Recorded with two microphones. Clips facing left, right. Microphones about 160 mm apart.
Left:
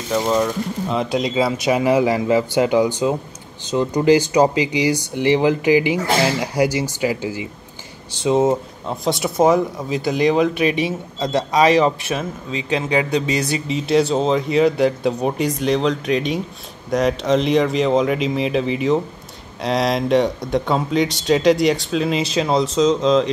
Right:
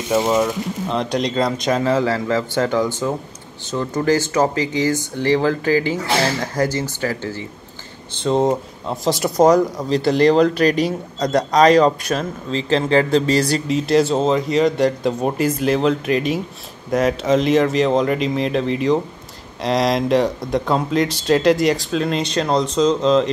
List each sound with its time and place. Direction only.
0.3 s speech: 5° right (ahead or behind)